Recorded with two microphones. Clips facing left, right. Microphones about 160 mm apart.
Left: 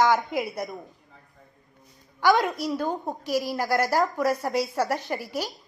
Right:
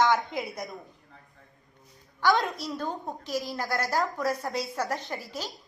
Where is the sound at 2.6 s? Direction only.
15° left (ahead or behind).